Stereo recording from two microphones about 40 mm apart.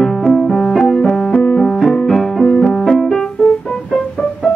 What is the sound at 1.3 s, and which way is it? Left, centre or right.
Music, left.